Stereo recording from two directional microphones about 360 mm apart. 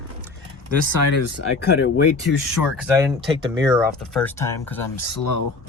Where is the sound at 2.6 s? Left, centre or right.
Centre.